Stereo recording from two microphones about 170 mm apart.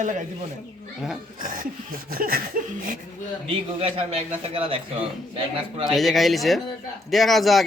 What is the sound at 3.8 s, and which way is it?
Speech, 35° right (ahead or behind).